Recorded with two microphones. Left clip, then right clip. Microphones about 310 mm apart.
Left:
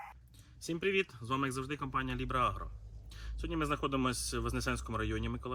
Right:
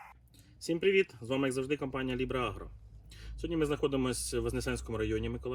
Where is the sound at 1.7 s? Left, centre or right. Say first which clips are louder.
Right 2 dB; centre.